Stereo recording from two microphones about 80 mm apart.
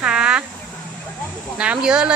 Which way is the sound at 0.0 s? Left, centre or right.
Centre.